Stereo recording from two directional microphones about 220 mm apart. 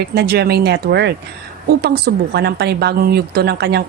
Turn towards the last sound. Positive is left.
turn(degrees=-50)  # may be behind; listen again after turning